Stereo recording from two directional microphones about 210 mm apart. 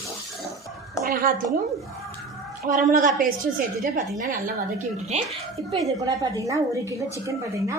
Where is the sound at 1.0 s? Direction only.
45° right (ahead or behind).